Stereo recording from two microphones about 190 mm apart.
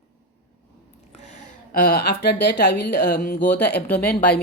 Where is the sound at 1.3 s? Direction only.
50° left (ahead or behind).